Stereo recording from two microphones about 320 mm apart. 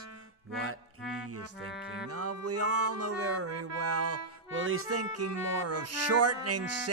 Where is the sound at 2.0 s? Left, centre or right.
Right.